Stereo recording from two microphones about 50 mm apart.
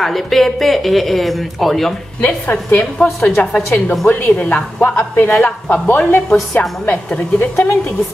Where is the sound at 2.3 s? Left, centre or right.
Left.